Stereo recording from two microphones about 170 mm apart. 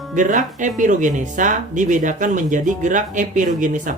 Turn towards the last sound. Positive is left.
turn(degrees=-50)  # may be behind; listen again after turning